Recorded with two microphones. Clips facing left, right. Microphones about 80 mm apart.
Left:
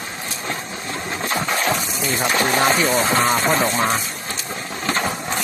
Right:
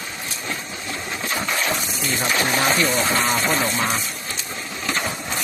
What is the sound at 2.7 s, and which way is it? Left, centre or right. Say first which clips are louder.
Speech: left 2 dB; centre.